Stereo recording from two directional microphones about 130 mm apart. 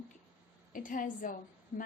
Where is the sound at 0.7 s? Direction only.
90° left.